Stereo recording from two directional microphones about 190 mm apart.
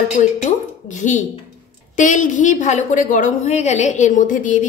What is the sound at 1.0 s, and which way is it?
A woman's voice, 40° left (ahead or behind).